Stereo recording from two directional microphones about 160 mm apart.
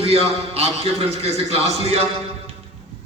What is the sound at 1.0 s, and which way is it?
Speech, 40° right (ahead or behind).